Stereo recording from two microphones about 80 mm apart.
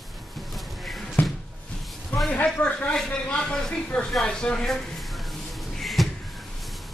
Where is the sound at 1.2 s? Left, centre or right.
Left.